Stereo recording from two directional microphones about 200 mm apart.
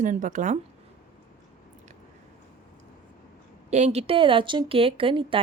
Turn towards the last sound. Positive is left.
turn(degrees=-25)  # may be behind; listen again after turning